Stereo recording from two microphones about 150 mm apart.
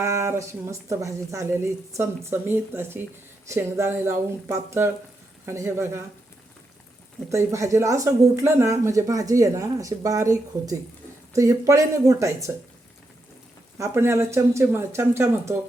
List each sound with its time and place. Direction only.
0.0 s speech: 20° right (ahead or behind)
7.3 s speech: 20° right (ahead or behind)
13.7 s speech: 20° right (ahead or behind)